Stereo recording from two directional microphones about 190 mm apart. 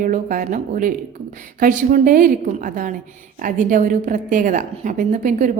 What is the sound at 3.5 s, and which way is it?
A woman's voice, 45° right (ahead or behind).